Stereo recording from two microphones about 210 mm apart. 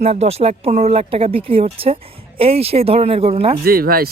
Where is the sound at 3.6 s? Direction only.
45° right (ahead or behind).